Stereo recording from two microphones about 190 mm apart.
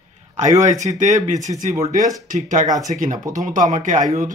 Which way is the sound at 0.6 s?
40° right (ahead or behind).